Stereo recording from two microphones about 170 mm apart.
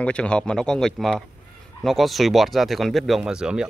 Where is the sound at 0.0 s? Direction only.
5° left (ahead or behind).